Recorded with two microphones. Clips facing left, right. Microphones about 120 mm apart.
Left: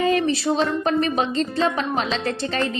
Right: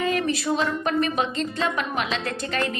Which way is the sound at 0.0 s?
30° left (ahead or behind).